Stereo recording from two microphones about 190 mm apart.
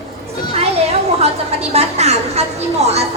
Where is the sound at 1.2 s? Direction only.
35° right (ahead or behind).